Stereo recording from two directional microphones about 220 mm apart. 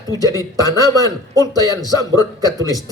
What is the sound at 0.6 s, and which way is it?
Speech, 15° left (ahead or behind).